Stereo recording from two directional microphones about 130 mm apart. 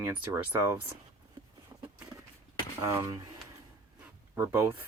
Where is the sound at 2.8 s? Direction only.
25° right (ahead or behind).